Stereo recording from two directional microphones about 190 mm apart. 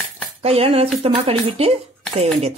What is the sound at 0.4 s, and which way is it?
Speech, 30° right (ahead or behind).